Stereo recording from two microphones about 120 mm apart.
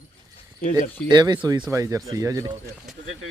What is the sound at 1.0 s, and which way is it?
Speech, 35° right (ahead or behind).